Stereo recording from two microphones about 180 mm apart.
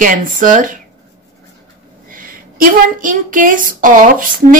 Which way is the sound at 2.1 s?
50° right (ahead or behind).